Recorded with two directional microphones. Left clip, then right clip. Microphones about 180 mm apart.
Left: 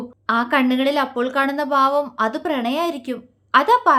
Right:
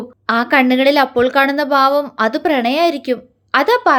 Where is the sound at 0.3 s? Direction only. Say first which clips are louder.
Right 5 dB; 20° right (ahead or behind).